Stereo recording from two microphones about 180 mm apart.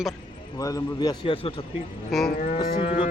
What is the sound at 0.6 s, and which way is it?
Speech, 20° left (ahead or behind).